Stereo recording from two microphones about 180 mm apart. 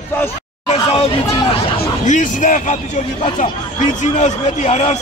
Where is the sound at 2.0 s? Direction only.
45° left (ahead or behind).